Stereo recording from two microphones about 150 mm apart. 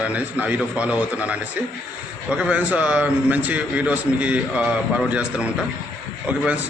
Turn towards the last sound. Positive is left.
turn(degrees=-10)  # may be behind; listen again after turning